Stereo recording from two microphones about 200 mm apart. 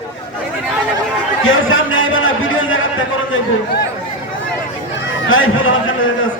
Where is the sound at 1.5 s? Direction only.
80° left.